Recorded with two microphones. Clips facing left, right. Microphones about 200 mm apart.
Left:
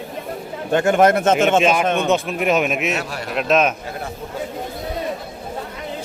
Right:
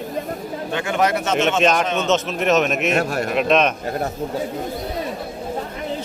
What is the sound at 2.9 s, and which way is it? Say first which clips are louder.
Speech: right 6 dB; 50° right (ahead or behind).